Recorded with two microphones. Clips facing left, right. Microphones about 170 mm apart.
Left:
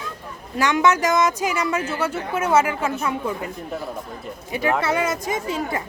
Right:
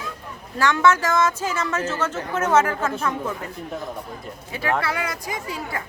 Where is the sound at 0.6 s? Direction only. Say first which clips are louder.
Even; 15° left (ahead or behind).